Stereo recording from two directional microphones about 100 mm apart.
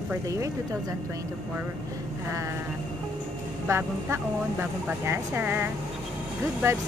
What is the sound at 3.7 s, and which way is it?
Speech, 25° right (ahead or behind).